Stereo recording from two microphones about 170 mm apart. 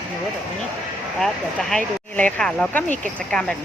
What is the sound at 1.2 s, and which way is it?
Speech, 5° left (ahead or behind).